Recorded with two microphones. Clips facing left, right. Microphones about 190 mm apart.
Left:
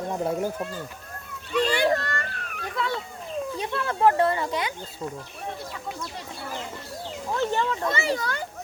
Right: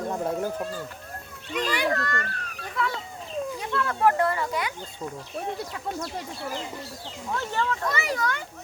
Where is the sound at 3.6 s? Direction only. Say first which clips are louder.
Left 2 dB; 20° left (ahead or behind).